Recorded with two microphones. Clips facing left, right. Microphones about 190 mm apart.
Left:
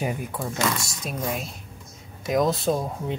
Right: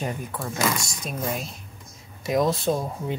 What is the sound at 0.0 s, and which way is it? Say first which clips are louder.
Rub: left 2 dB; 10° left (ahead or behind).